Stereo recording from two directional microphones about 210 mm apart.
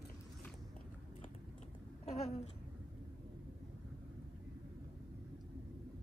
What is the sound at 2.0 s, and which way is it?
Babbling, 30° left (ahead or behind).